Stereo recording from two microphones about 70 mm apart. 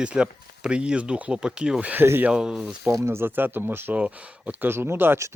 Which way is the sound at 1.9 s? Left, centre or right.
Right.